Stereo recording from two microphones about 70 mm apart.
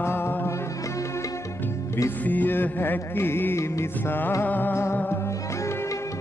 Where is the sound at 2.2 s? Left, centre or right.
Left.